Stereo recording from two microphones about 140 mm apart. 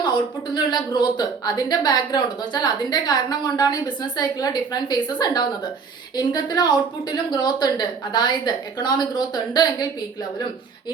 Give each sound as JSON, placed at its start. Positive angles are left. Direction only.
{"t": 0.5, "sound": "a woman's voice", "side_deg": 30}